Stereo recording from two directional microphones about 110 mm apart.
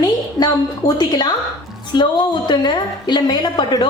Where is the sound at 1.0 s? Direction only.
40° left (ahead or behind).